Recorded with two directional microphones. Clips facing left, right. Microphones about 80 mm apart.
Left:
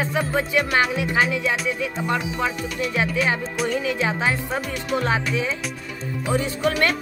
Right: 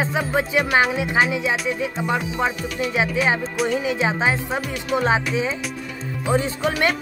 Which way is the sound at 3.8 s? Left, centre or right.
Centre.